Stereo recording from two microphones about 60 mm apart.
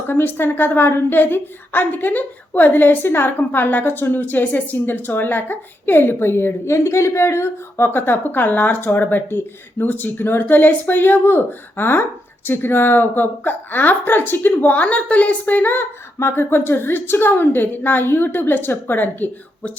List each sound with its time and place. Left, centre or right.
0.1 s a woman's voice: left